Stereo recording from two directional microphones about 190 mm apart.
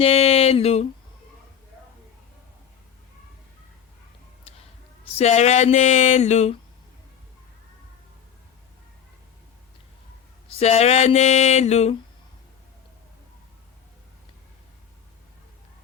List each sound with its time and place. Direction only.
0.0 s a sound: 30° left (ahead or behind)
5.1 s speech: 35° left (ahead or behind)
10.5 s speech: 35° left (ahead or behind)